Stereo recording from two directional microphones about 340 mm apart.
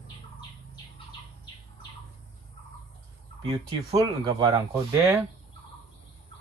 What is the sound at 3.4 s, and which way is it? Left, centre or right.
Speech, centre.